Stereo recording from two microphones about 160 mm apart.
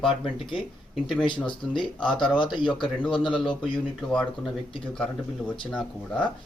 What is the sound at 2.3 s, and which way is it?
Speech, 30° left (ahead or behind).